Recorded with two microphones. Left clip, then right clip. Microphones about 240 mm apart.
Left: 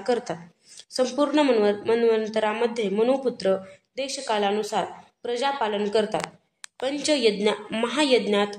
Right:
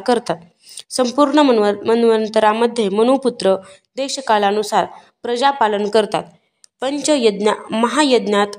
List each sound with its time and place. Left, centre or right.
0.0 s a woman's voice: right